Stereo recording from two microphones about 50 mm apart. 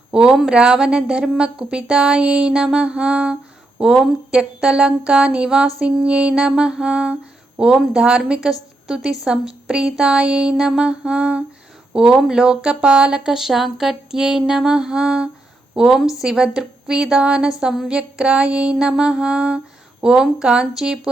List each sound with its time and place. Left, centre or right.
0.1 s a woman's voice: centre
3.9 s speech: centre
4.4 s a woman's voice: centre
8.4 s a woman's voice: centre